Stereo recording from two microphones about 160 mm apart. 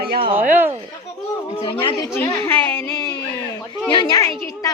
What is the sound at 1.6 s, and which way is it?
Speech, 35° left (ahead or behind).